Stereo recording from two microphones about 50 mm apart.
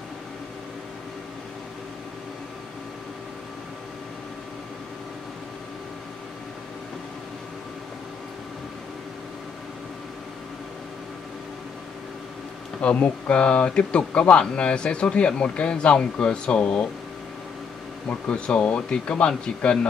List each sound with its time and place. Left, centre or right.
12.8 s speech: left
18.3 s speech: left